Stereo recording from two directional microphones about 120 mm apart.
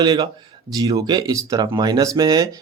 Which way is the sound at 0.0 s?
35° right (ahead or behind).